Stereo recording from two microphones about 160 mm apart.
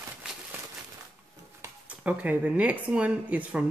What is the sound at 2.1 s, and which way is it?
Speech, 10° right (ahead or behind).